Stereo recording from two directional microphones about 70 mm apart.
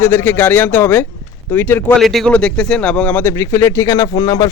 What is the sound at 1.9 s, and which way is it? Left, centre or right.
Speech, centre.